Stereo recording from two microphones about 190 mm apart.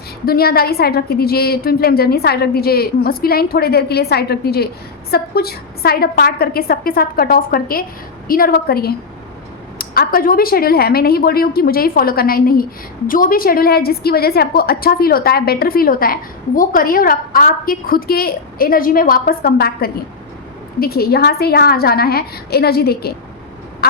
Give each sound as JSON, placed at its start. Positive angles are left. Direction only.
{"t": 0.3, "sound": "a woman's voice", "side_deg": 55}